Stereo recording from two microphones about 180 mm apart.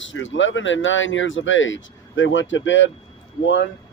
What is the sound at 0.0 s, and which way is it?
Speech, 90° left.